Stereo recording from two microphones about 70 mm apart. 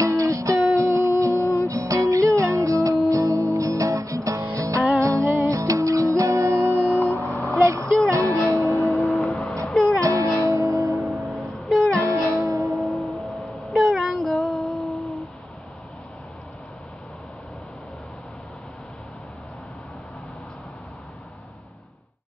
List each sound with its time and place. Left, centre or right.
0.0 s music: right
7.0 s vehicle: left
8.1 s music: right
8.5 s music: left
8.8 s music: centre
9.3 s music: centre
9.7 s music: centre
9.9 s music: right
11.0 s music: centre
12.0 s music: right
12.7 s a sound: centre